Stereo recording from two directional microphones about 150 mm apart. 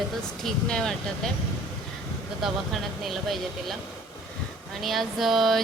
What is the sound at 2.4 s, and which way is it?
Speech, centre (ahead or behind).